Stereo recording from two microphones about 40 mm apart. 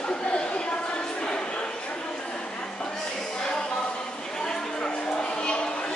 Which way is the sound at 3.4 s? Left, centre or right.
Left.